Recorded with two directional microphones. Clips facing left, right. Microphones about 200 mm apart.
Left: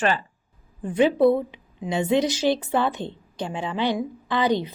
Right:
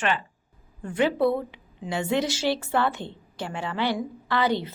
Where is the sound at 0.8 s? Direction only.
20° left (ahead or behind).